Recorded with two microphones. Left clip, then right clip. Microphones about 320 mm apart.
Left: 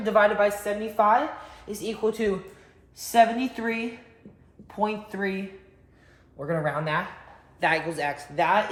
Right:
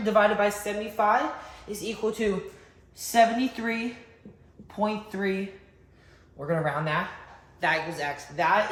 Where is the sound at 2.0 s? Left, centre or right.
Centre.